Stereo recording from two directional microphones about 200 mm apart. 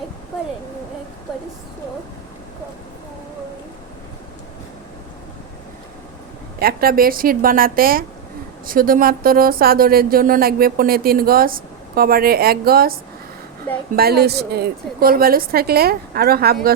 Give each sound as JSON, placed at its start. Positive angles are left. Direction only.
{"t": 6.6, "sound": "speech", "side_deg": -50}